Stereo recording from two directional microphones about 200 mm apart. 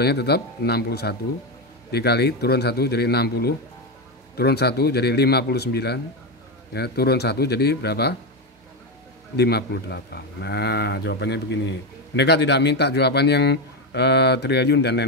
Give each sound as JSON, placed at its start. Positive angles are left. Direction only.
{"t": 0.0, "sound": "a man's voice", "side_deg": 55}
{"t": 9.4, "sound": "a man's voice", "side_deg": 55}